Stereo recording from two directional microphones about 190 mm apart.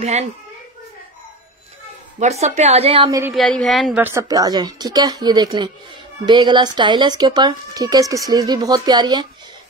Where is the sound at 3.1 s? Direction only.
10° right (ahead or behind).